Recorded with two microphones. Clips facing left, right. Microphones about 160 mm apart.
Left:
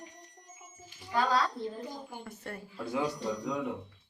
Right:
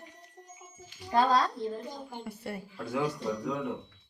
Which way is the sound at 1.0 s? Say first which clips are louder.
Right 4 dB; 35° right (ahead or behind).